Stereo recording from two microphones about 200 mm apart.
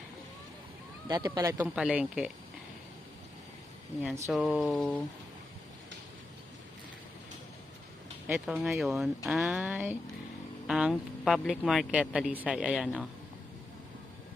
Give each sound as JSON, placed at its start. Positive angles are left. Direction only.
{"t": 1.0, "sound": "speech", "side_deg": -20}
{"t": 1.6, "sound": "speech", "side_deg": -5}
{"t": 4.3, "sound": "speech", "side_deg": 0}
{"t": 8.3, "sound": "speech", "side_deg": 0}